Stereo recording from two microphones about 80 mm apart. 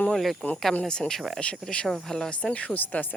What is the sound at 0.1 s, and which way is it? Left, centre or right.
Speech, centre.